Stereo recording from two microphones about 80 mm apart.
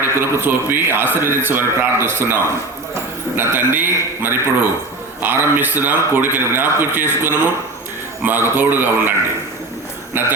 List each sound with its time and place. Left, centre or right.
0.2 s a man's voice: right